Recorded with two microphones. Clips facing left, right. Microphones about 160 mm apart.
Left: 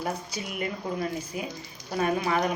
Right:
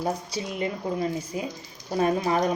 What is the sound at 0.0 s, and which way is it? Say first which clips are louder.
Speech: right 4 dB; 30° right (ahead or behind).